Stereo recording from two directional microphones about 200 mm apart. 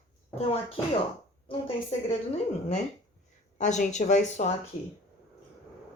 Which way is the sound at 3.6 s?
35° left (ahead or behind).